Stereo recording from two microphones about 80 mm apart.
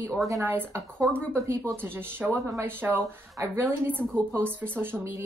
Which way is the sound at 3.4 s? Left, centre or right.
Right.